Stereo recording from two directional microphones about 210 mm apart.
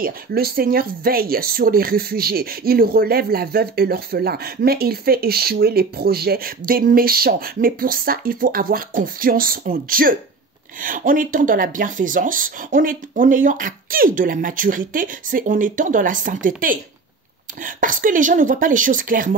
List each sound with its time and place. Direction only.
0.0 s speech: 45° right (ahead or behind)